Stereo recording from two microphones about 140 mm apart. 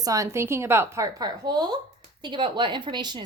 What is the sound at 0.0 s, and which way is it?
A woman's voice, 25° right (ahead or behind).